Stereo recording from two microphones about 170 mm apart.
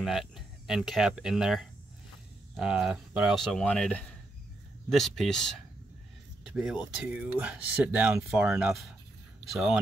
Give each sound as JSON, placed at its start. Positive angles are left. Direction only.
{"t": 0.0, "sound": "speech", "side_deg": 0}
{"t": 6.5, "sound": "speech", "side_deg": -5}